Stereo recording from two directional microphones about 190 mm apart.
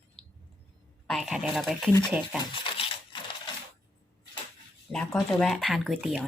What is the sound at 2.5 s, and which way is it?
Crushing, 25° left (ahead or behind).